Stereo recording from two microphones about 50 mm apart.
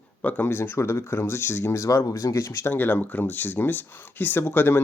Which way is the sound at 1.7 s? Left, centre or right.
Left.